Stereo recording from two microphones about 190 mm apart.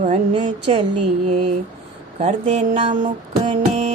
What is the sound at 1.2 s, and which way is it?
Mantra, 35° right (ahead or behind).